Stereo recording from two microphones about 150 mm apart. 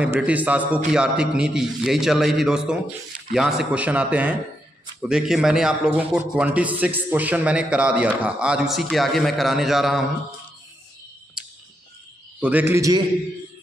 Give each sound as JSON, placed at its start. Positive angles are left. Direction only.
{"t": 0.0, "sound": "a man's voice", "side_deg": -10}
{"t": 12.4, "sound": "a man's voice", "side_deg": -10}
{"t": 12.7, "sound": "a man's voice", "side_deg": -20}